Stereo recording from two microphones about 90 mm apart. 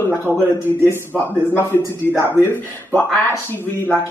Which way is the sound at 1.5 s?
30° left (ahead or behind).